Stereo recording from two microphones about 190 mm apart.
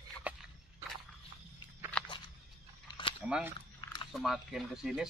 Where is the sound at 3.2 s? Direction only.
5° right (ahead or behind).